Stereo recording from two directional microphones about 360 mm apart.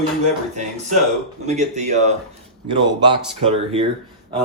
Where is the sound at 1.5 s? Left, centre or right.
Centre.